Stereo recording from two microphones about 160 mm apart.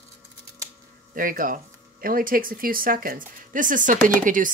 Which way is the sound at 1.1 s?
60° right (ahead or behind).